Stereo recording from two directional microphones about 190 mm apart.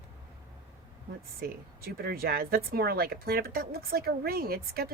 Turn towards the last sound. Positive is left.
turn(degrees=-50)  # may be behind; listen again after turning